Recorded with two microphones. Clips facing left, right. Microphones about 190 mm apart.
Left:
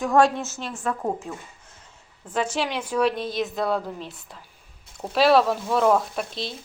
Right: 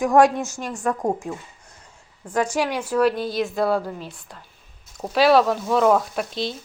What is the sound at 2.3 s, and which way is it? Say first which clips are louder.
Speech: right 3 dB; 10° right (ahead or behind).